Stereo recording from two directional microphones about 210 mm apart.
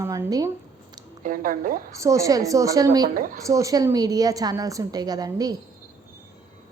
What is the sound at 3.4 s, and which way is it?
A woman's voice, 15° right (ahead or behind).